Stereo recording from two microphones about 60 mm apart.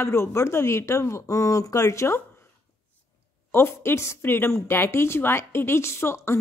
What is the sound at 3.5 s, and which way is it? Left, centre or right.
A woman's voice, left.